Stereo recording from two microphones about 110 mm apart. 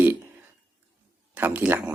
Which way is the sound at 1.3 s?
15° right (ahead or behind).